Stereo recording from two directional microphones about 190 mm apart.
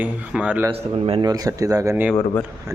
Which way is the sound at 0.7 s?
30° right (ahead or behind).